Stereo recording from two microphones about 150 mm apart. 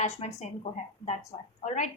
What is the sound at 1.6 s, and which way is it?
Speech, 55° left (ahead or behind).